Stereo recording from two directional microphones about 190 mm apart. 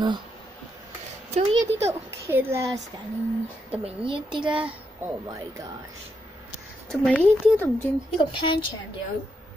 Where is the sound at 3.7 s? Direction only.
30° right (ahead or behind).